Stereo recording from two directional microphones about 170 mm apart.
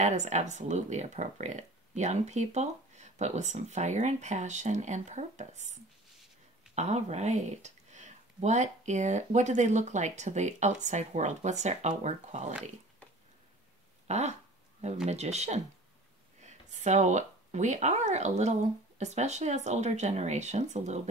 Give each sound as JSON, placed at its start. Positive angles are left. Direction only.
{"t": 0.0, "sound": "speech", "side_deg": -45}
{"t": 14.0, "sound": "speech", "side_deg": -40}